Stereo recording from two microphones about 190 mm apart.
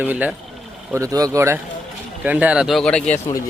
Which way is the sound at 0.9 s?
20° right (ahead or behind).